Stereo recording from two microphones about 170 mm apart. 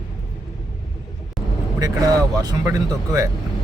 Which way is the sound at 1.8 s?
20° right (ahead or behind).